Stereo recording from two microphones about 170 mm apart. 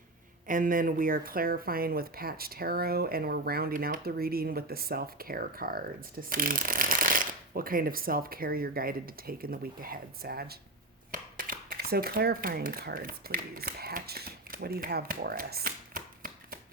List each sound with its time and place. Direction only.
0.4 s speech: 50° right (ahead or behind)
11.1 s speech: 55° right (ahead or behind)